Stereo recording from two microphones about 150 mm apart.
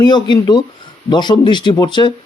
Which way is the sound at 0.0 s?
30° left (ahead or behind).